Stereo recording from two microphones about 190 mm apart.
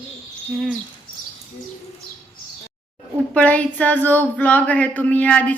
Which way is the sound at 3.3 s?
5° left (ahead or behind).